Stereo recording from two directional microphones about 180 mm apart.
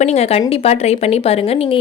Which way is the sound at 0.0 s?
35° left (ahead or behind).